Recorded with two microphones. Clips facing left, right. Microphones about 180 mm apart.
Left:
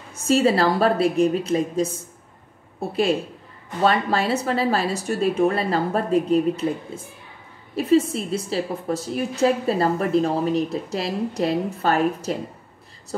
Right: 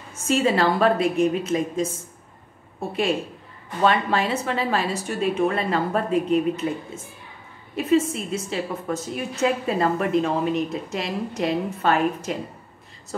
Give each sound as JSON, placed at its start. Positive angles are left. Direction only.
{"t": 0.3, "sound": "a woman's voice", "side_deg": 35}
{"t": 3.8, "sound": "a woman's voice", "side_deg": 40}
{"t": 7.7, "sound": "a woman's voice", "side_deg": 35}